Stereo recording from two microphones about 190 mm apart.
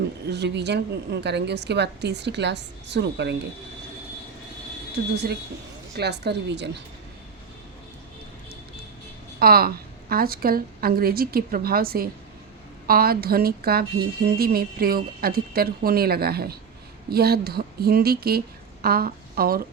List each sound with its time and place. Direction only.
0.3 s a woman's voice: 65° right (ahead or behind)
5.1 s a woman's voice: 60° right (ahead or behind)
9.4 s a woman's voice: 50° right (ahead or behind)